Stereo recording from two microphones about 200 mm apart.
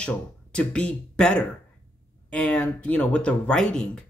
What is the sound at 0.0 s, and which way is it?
Speech, 5° left (ahead or behind).